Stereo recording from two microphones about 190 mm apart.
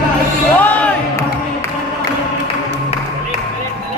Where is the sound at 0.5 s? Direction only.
10° left (ahead or behind).